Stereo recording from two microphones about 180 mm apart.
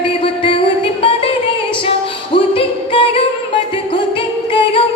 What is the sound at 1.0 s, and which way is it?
Music, 30° left (ahead or behind).